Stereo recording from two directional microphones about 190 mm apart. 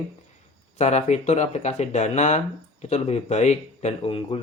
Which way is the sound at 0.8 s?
35° left (ahead or behind).